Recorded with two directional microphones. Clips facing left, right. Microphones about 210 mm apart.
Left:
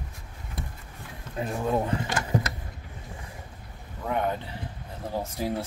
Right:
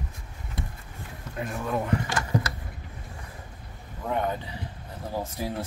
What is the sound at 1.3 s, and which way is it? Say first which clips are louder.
Speech: left 3 dB; 25° left (ahead or behind).